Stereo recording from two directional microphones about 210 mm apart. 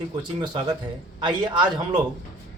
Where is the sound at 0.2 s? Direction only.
20° right (ahead or behind).